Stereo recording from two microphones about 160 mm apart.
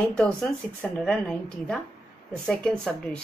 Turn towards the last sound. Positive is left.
turn(degrees=5)  # may be behind; listen again after turning